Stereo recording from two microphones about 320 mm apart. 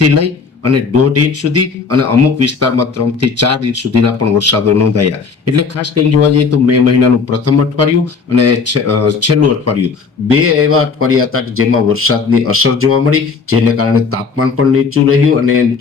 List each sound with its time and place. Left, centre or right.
0.0 s a man's voice: right